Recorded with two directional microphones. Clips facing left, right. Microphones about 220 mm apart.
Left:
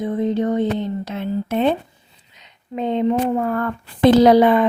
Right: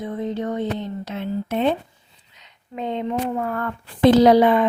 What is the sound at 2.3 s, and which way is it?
Speech, 20° left (ahead or behind).